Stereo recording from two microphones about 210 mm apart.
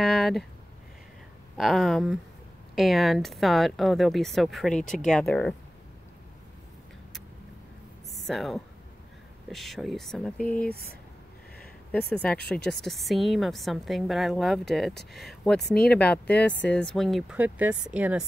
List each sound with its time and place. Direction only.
0.0 s a sound: centre (ahead or behind)
1.6 s a woman's voice: centre (ahead or behind)
8.3 s a woman's voice: centre (ahead or behind)
12.1 s a woman's voice: 5° left (ahead or behind)
12.5 s speech: 55° left (ahead or behind)
12.8 s a woman's voice: centre (ahead or behind)